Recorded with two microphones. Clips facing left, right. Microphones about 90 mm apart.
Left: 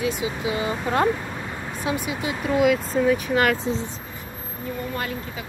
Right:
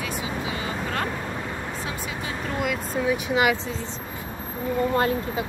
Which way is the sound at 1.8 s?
15° left (ahead or behind).